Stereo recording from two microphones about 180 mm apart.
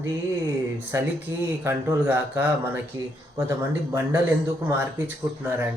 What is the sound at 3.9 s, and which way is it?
Speech, 15° right (ahead or behind).